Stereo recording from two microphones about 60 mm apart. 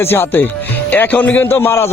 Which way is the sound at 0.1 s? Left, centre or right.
Left.